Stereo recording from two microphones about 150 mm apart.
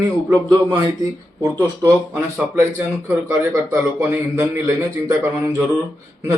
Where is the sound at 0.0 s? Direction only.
25° right (ahead or behind).